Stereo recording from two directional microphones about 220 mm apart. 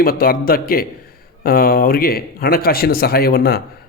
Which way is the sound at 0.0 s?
40° left (ahead or behind).